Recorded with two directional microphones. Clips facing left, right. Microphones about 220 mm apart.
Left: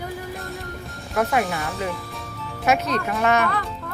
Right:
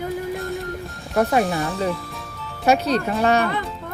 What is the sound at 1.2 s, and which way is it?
Speech, 30° right (ahead or behind).